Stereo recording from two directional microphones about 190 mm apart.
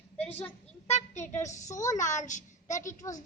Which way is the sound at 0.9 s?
35° left (ahead or behind).